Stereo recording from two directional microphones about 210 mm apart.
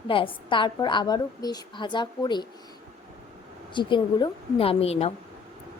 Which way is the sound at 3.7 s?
20° left (ahead or behind).